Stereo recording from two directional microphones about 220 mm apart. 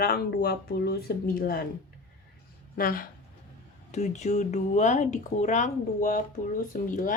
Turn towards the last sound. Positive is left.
turn(degrees=35)  # may be behind; listen again after turning